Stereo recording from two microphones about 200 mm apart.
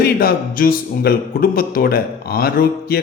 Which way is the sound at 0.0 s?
50° left (ahead or behind).